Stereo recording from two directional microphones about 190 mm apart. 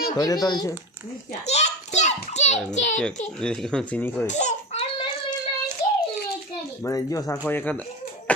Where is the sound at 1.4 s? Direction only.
35° left (ahead or behind).